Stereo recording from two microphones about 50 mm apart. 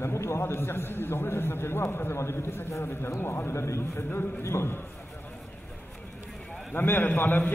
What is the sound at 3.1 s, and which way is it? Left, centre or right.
A man's voice, left.